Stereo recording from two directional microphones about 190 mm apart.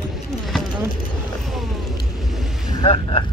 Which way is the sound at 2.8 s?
30° left (ahead or behind).